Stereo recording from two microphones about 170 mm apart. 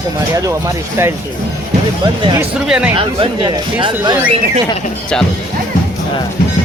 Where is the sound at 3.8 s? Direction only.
30° right (ahead or behind).